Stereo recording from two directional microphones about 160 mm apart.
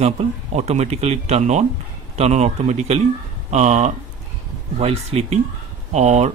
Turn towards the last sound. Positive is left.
turn(degrees=-45)  # may be behind; listen again after turning